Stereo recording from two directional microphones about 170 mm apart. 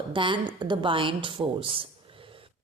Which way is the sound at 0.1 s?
30° right (ahead or behind).